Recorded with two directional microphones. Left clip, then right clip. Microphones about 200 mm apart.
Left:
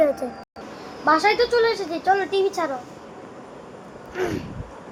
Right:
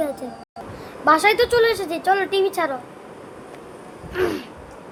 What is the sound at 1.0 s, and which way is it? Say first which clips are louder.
A woman's voice: right 2 dB; 20° right (ahead or behind).